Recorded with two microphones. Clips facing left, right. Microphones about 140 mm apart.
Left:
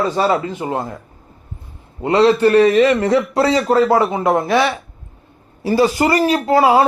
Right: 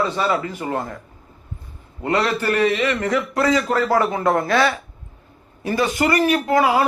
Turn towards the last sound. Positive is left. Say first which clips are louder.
# left 4 dB
turn(degrees=30)  # may be behind; listen again after turning